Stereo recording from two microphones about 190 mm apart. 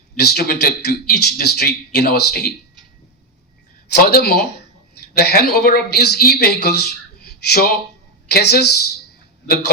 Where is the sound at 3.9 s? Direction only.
55° left (ahead or behind).